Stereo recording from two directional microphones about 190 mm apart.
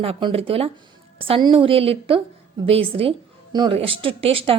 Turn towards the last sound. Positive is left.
turn(degrees=-30)  # may be behind; listen again after turning